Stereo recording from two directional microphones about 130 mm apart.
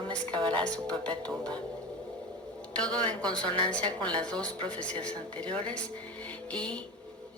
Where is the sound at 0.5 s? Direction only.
10° left (ahead or behind).